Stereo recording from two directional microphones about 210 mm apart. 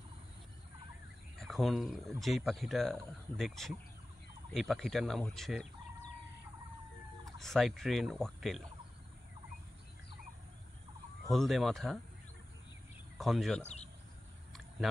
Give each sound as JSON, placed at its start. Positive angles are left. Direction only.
{"t": 1.4, "sound": "speech", "side_deg": 0}
{"t": 7.3, "sound": "speech", "side_deg": 0}
{"t": 11.2, "sound": "speech", "side_deg": 0}
{"t": 13.2, "sound": "speech", "side_deg": 0}
{"t": 13.6, "sound": "speech", "side_deg": 30}